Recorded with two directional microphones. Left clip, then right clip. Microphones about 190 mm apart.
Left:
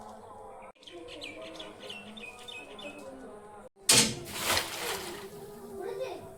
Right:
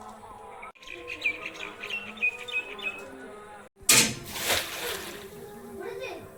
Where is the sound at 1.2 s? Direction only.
20° left (ahead or behind).